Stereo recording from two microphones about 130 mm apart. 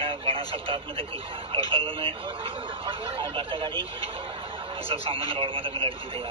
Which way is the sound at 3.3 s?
40° right (ahead or behind).